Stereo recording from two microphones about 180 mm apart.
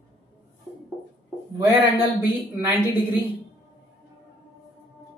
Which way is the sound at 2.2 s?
10° right (ahead or behind).